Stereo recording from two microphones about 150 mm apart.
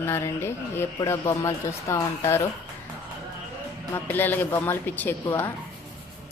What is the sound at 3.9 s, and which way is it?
A woman's voice, 10° left (ahead or behind).